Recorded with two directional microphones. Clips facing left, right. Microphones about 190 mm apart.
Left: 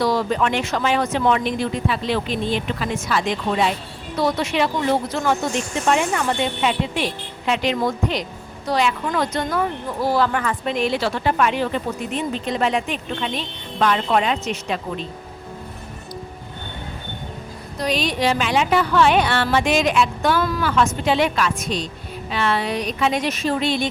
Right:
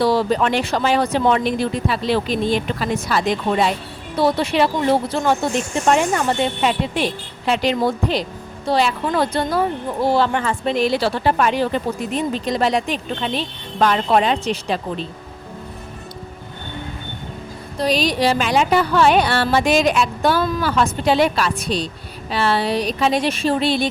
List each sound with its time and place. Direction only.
0.0 s a woman's voice: 30° right (ahead or behind)
17.7 s a woman's voice: 35° right (ahead or behind)